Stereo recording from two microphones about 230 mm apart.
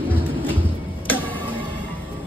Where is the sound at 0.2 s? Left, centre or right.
Left.